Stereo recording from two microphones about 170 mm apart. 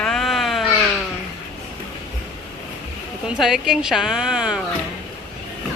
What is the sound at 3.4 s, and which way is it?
Speech, 5° right (ahead or behind).